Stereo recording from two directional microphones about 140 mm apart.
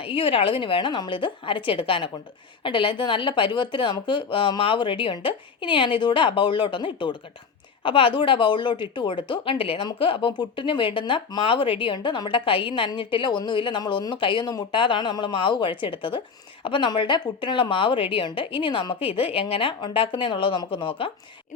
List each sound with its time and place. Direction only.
0.0 s speech: 40° left (ahead or behind)